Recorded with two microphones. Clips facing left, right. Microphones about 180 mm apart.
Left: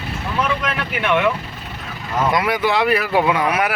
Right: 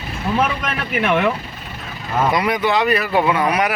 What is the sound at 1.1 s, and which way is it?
Speech, 40° right (ahead or behind).